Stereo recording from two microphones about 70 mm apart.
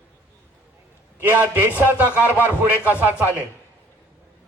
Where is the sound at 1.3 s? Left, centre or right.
Right.